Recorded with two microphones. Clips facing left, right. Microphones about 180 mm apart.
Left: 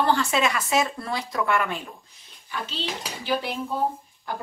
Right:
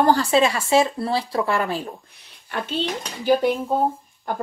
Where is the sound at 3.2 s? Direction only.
45° right (ahead or behind).